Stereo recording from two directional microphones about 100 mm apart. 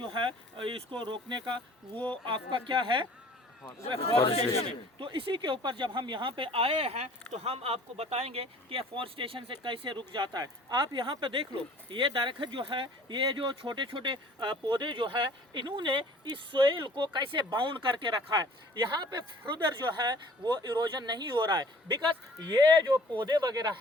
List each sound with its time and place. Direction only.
0.0 s speech: 55° right (ahead or behind)
3.9 s speech: 70° left (ahead or behind)
4.9 s speech: 60° right (ahead or behind); by 23.7 s 40° right (ahead or behind)